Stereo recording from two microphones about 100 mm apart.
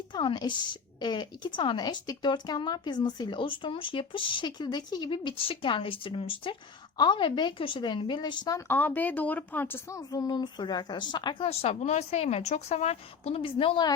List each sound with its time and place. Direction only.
0.1 s speech: 50° left (ahead or behind)
8.4 s a woman's voice: 25° left (ahead or behind)
10.1 s speech: 40° left (ahead or behind)
11.4 s a woman's voice: 85° left; by 13.8 s 60° left (ahead or behind)